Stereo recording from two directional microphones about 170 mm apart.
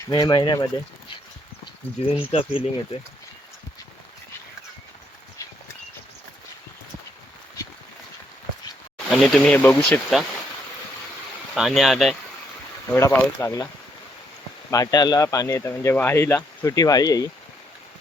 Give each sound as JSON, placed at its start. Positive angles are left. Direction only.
{"t": 0.1, "sound": "speech", "side_deg": 25}
{"t": 2.0, "sound": "speech", "side_deg": 40}
{"t": 9.0, "sound": "speech", "side_deg": 0}
{"t": 11.5, "sound": "speech", "side_deg": 0}
{"t": 12.9, "sound": "speech", "side_deg": 15}
{"t": 14.7, "sound": "speech", "side_deg": 20}